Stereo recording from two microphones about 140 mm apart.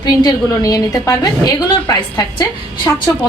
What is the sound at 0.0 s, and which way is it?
A woman's voice, 30° left (ahead or behind).